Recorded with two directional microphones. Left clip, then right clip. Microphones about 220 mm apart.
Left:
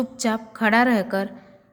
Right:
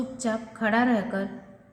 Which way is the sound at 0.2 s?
45° left (ahead or behind).